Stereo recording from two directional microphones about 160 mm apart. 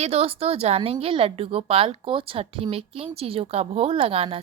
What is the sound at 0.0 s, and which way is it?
Speech, 35° right (ahead or behind).